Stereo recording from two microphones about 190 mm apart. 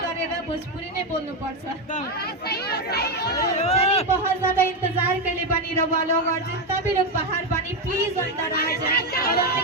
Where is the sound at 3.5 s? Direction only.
35° left (ahead or behind).